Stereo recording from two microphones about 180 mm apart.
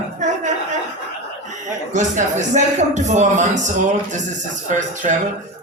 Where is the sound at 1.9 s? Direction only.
40° right (ahead or behind).